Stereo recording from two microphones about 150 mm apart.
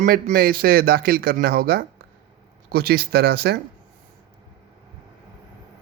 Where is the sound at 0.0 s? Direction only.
75° right (ahead or behind); by 3.6 s 90° right.